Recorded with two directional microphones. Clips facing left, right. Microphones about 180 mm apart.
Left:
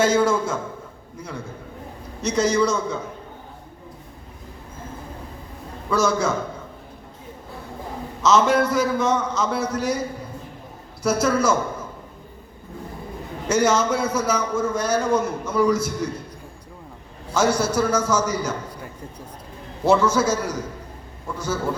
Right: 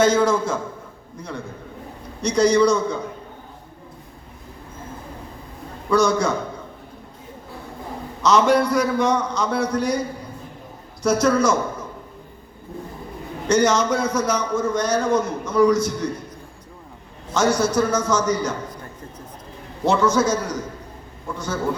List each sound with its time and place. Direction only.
0.0 s a man's voice: 5° left (ahead or behind)
2.2 s a man's voice: 5° left (ahead or behind)
5.9 s a man's voice: 5° left (ahead or behind)
8.2 s a man's voice: centre (ahead or behind)
11.0 s a man's voice: 5° left (ahead or behind)
13.5 s a man's voice: 5° left (ahead or behind)
17.3 s a man's voice: 5° left (ahead or behind)
19.8 s a man's voice: 5° left (ahead or behind)